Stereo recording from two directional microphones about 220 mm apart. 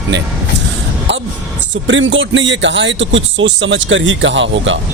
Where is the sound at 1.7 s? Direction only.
60° right (ahead or behind).